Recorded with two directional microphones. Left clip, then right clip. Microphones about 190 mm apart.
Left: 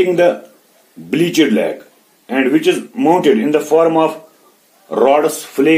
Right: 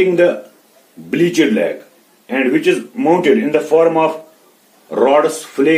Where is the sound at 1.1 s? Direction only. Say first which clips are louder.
Even; 35° left (ahead or behind).